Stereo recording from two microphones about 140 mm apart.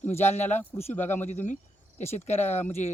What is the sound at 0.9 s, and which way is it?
Speech, 15° left (ahead or behind).